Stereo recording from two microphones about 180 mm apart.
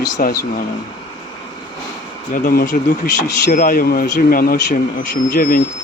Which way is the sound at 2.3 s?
55° left (ahead or behind).